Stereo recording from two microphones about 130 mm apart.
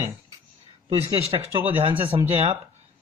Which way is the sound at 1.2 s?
45° right (ahead or behind).